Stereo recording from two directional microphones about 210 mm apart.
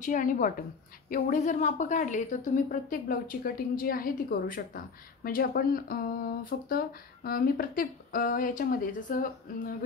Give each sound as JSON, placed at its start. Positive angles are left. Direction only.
{"t": 0.0, "sound": "a woman's voice", "side_deg": 40}